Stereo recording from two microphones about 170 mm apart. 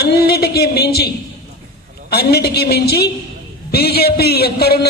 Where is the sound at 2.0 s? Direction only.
70° left (ahead or behind).